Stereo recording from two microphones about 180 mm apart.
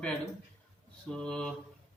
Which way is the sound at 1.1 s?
5° left (ahead or behind).